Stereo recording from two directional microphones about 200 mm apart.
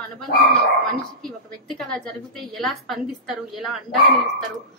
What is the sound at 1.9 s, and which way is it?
A woman's voice, 5° left (ahead or behind).